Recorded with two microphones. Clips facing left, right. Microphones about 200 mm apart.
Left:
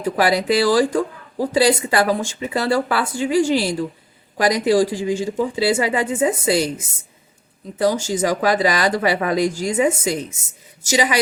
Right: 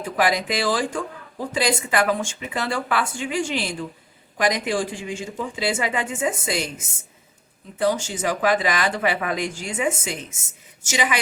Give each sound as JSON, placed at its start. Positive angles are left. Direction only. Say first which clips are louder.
{"t": 0.0, "sound": "speech", "louder": "left 4 dB", "side_deg": 35}
{"t": 7.8, "sound": "speech", "louder": "left 4 dB", "side_deg": 40}